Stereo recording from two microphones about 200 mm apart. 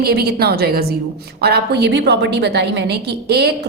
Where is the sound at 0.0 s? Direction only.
50° right (ahead or behind).